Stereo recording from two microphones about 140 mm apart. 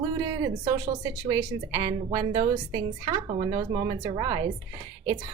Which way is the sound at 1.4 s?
30° right (ahead or behind).